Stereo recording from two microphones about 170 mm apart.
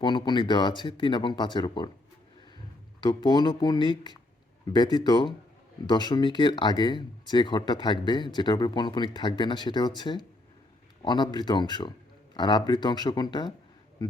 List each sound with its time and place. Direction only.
0.0 s speech: 25° left (ahead or behind)
3.0 s speech: 25° left (ahead or behind)